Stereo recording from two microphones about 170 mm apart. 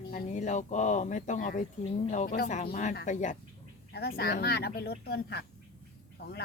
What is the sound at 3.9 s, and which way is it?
Speech, 70° left (ahead or behind).